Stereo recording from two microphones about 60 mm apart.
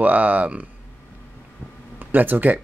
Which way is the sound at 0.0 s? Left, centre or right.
Right.